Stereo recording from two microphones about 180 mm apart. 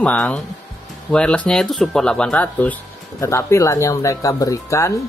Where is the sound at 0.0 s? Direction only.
5° left (ahead or behind).